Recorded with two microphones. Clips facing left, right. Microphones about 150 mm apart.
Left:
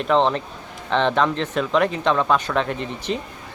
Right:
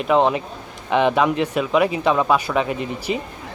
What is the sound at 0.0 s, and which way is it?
Speech, 10° right (ahead or behind).